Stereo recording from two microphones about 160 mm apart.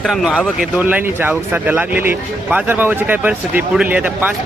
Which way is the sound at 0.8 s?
10° right (ahead or behind).